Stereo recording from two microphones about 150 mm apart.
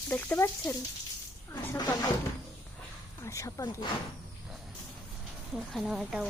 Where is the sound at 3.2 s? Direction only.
20° left (ahead or behind).